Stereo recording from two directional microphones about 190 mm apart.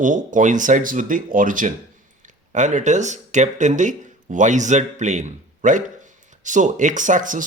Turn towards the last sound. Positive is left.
turn(degrees=-45)  # may be behind; listen again after turning